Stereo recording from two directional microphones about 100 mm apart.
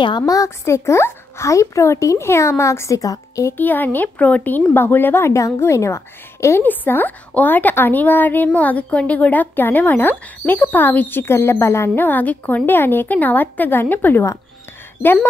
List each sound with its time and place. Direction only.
0.3 s speech: 30° left (ahead or behind)
3.5 s speech: 20° left (ahead or behind)